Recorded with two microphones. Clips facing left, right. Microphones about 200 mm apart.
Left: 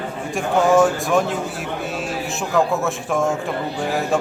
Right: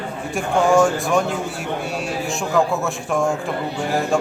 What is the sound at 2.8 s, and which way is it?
Speech, centre (ahead or behind).